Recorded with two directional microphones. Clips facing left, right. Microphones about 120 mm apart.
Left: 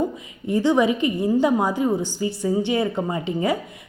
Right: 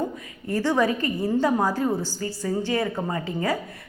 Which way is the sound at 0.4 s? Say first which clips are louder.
Left 4 dB; 20° left (ahead or behind).